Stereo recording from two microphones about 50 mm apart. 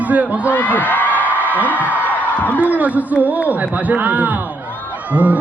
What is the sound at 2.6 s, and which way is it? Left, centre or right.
A man's voice, right.